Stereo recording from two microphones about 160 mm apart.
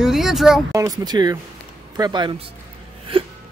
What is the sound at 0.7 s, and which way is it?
Speech, 20° right (ahead or behind).